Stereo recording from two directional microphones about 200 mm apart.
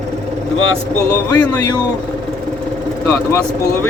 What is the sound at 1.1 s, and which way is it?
Speech, 15° left (ahead or behind).